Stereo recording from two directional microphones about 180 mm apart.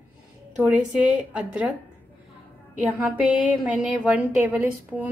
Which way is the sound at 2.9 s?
10° right (ahead or behind).